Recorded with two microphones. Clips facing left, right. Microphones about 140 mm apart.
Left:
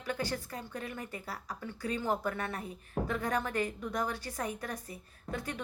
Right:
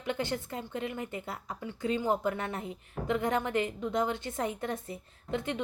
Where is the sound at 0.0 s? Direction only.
20° right (ahead or behind).